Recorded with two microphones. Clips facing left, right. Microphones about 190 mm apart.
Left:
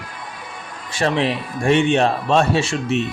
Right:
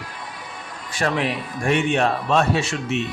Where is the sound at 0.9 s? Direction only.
25° left (ahead or behind).